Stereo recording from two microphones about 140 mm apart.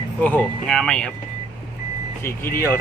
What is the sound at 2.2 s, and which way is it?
Speech, 15° left (ahead or behind).